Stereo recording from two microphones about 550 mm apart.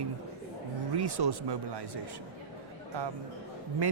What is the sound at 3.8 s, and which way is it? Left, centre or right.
Speech, right.